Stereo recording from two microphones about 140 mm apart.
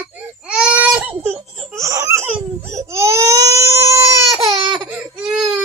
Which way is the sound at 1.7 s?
25° right (ahead or behind).